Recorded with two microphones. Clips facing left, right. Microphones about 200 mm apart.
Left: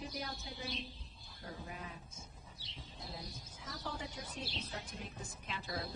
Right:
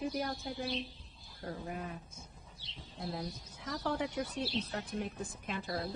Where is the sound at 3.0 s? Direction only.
65° right (ahead or behind); by 5.8 s 50° right (ahead or behind).